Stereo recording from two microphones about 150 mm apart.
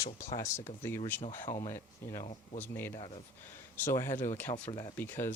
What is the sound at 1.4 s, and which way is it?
Speech, 30° left (ahead or behind).